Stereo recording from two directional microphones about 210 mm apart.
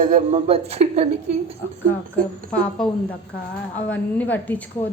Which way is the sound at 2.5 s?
5° left (ahead or behind).